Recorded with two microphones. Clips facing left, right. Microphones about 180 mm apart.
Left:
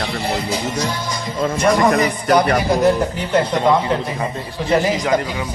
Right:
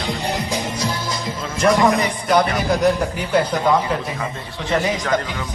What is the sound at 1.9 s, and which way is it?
Speech, 60° left (ahead or behind).